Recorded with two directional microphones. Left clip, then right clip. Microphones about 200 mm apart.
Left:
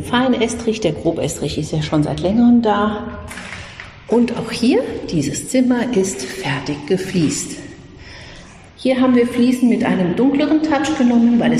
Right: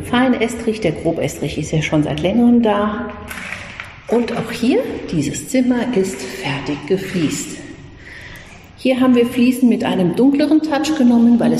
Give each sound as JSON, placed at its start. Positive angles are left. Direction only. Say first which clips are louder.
{"t": 0.0, "sound": "a woman's voice", "louder": "even", "side_deg": 0}
{"t": 4.1, "sound": "a woman's voice", "louder": "left 1 dB", "side_deg": 0}
{"t": 8.8, "sound": "a woman's voice", "louder": "right 1 dB", "side_deg": -10}
{"t": 11.1, "sound": "a woman's voice", "louder": "right 1 dB", "side_deg": 0}